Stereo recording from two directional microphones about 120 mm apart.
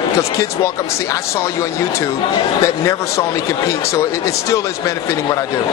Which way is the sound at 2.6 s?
25° left (ahead or behind).